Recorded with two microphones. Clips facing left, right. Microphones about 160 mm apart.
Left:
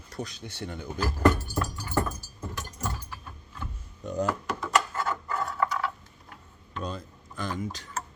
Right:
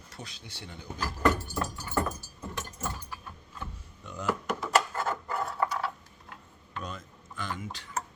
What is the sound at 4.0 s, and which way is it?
Speech, 40° left (ahead or behind).